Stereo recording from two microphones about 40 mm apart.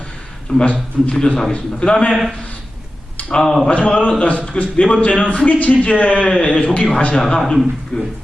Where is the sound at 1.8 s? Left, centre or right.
Left.